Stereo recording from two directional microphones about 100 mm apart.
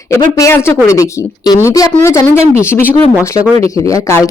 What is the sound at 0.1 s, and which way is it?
Speech, 30° left (ahead or behind).